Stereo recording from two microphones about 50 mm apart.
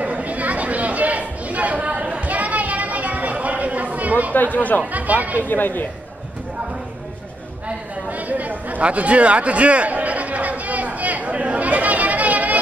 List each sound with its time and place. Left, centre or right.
0.0 s chatter: right
4.3 s speech: left
4.9 s speech: right
5.4 s speech: left
8.3 s chatter: right